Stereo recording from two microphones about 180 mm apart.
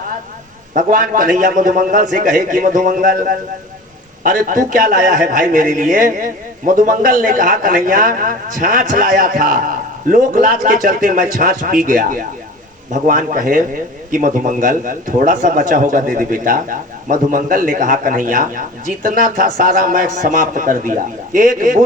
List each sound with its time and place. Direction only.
0.7 s a man's voice: 45° right (ahead or behind)